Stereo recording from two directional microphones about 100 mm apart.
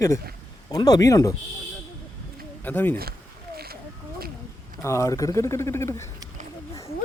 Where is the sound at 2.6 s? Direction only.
20° left (ahead or behind).